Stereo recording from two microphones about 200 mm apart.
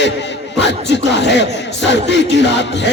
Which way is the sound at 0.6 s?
60° left (ahead or behind).